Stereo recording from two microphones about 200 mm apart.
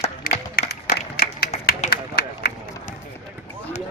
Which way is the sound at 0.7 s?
50° left (ahead or behind).